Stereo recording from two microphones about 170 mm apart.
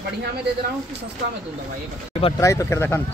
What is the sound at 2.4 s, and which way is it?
Speech, 20° left (ahead or behind).